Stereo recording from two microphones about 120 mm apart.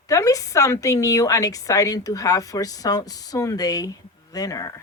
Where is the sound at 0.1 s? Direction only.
30° left (ahead or behind).